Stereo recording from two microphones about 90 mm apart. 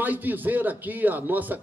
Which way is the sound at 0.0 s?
20° right (ahead or behind).